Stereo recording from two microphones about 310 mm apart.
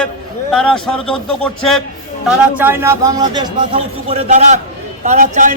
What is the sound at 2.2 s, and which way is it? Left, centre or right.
A man's voice, centre.